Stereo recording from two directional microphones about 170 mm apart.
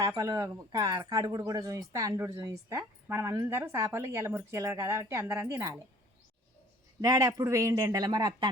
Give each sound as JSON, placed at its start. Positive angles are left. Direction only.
{"t": 0.2, "sound": "speech", "side_deg": -20}
{"t": 7.0, "sound": "speech", "side_deg": -20}